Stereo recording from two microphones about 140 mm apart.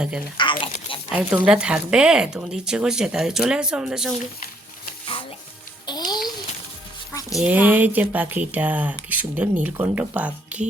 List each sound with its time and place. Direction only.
0.3 s biting: 35° left (ahead or behind)
1.1 s speech: 5° right (ahead or behind)
5.8 s music: 30° left (ahead or behind)
7.1 s a sound: 25° left (ahead or behind)
7.3 s speech: 10° right (ahead or behind)